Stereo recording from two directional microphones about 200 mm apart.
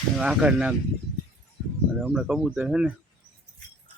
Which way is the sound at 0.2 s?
5° right (ahead or behind).